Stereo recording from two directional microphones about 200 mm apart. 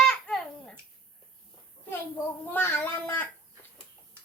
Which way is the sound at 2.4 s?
10° left (ahead or behind).